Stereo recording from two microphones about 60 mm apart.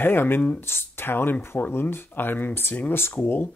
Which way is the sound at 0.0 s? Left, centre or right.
Left.